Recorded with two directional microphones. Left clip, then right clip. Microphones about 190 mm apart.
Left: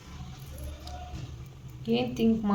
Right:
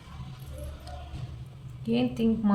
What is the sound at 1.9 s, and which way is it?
Speech, 35° left (ahead or behind).